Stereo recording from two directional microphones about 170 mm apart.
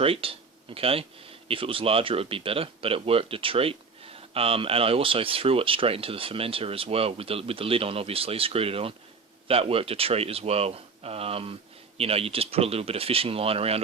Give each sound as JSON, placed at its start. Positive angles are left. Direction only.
{"t": 0.0, "sound": "speech", "side_deg": -35}